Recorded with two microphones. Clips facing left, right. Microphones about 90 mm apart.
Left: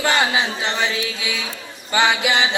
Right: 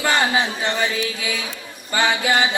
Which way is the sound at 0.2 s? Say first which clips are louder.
Even; 40° right (ahead or behind).